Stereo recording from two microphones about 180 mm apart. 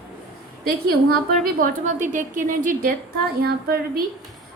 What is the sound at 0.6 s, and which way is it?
A woman's voice, 55° right (ahead or behind).